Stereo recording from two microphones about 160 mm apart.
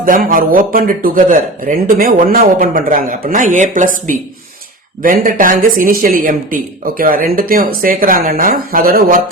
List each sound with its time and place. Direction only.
0.0 s speech: 60° right (ahead or behind)